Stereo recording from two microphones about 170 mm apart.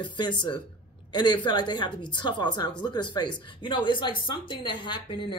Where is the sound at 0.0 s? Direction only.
25° left (ahead or behind).